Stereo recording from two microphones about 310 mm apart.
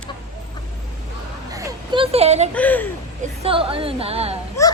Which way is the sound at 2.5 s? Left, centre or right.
Centre.